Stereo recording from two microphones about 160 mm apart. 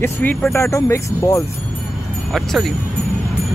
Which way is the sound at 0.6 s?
20° left (ahead or behind).